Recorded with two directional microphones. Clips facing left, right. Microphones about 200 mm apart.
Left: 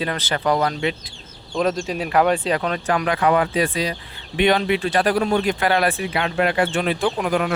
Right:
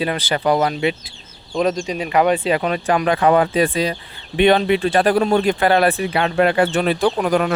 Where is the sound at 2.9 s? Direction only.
30° right (ahead or behind).